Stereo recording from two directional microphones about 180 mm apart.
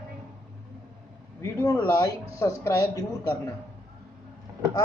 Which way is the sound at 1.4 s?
20° left (ahead or behind).